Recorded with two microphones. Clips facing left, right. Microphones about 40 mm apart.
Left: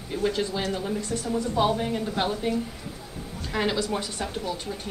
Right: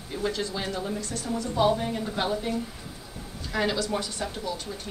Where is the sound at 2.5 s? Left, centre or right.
Left.